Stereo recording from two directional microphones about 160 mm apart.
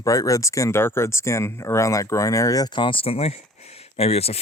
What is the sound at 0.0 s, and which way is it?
Speech, 20° left (ahead or behind).